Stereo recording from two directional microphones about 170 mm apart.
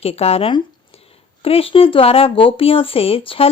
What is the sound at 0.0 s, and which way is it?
A woman's voice, 35° left (ahead or behind).